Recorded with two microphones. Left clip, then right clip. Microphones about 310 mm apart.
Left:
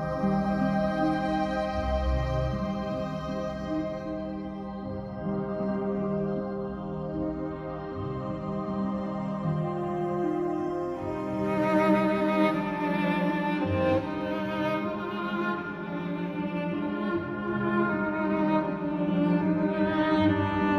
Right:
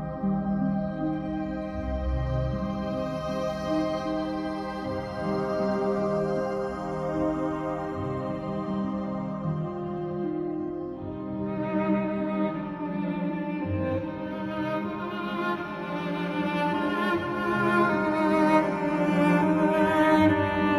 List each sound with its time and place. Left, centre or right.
0.2 s music: left
5.6 s music: right
11.5 s music: left
13.7 s music: left
17.5 s cello: right
19.1 s cello: right; by 20.7 s centre